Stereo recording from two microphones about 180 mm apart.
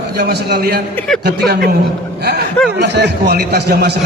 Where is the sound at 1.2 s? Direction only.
65° right (ahead or behind).